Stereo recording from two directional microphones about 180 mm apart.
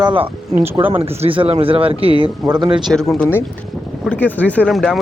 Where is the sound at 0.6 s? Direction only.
10° right (ahead or behind).